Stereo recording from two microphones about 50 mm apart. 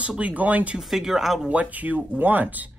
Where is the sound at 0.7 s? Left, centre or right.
Centre.